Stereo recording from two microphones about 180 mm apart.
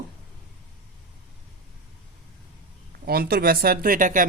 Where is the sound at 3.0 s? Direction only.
60° right (ahead or behind).